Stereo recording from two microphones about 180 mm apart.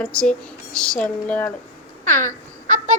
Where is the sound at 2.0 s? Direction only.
45° right (ahead or behind).